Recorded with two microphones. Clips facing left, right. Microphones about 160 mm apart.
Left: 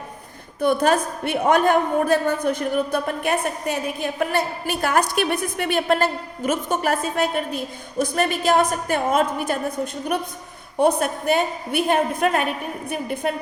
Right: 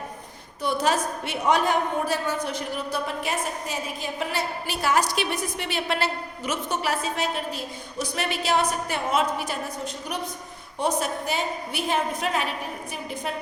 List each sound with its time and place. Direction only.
0.6 s a woman's voice: 55° left (ahead or behind)